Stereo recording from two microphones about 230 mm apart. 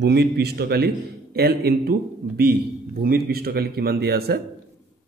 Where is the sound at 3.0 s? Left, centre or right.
Right.